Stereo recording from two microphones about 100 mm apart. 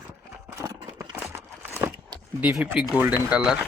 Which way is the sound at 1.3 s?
20° right (ahead or behind).